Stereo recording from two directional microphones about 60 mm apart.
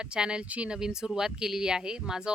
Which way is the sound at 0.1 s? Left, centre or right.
Centre.